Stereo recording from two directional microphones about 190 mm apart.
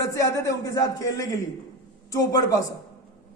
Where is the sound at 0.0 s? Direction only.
15° left (ahead or behind).